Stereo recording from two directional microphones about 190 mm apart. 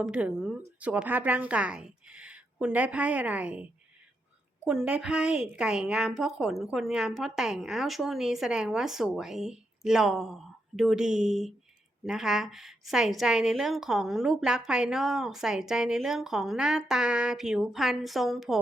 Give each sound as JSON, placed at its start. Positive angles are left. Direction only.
{"t": 0.0, "sound": "a woman's voice", "side_deg": -5}